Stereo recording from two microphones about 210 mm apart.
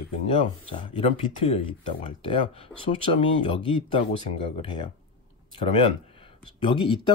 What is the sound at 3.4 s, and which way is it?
Speech, 25° left (ahead or behind).